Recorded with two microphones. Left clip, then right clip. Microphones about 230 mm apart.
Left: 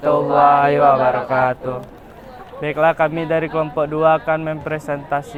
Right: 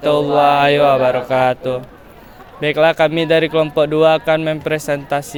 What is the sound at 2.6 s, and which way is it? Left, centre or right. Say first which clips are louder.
Speech: right 3 dB; right.